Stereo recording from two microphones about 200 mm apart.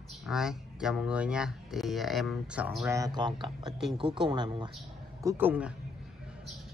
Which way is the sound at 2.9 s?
20° right (ahead or behind).